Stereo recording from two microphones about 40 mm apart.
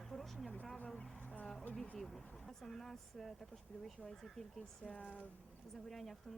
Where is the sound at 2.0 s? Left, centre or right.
Centre.